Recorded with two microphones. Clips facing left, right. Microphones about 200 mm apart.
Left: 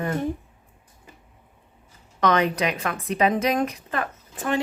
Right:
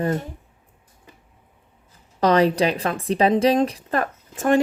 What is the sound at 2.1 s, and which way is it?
A woman's voice, 35° right (ahead or behind).